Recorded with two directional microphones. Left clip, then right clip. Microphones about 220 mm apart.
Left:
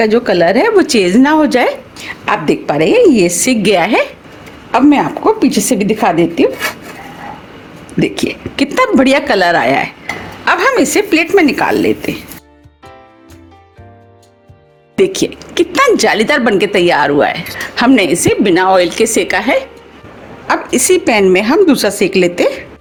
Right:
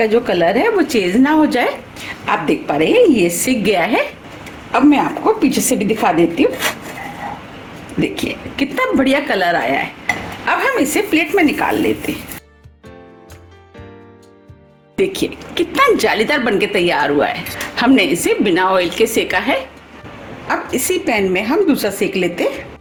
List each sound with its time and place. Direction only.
0.0 s a woman's voice: 45° left (ahead or behind)
2.2 s a woman's voice: 45° left (ahead or behind)
8.0 s a woman's voice: 45° left (ahead or behind)
14.9 s a woman's voice: 35° left (ahead or behind)